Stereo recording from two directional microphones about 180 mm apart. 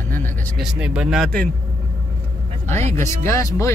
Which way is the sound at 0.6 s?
5° right (ahead or behind).